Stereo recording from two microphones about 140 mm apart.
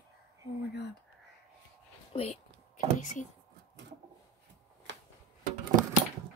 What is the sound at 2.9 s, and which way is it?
Speech, 65° left (ahead or behind).